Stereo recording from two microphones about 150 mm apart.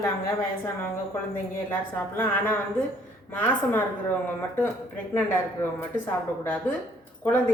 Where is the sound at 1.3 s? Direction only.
15° left (ahead or behind).